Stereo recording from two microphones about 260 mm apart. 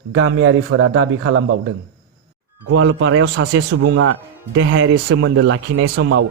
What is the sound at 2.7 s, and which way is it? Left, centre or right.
A man's voice, right.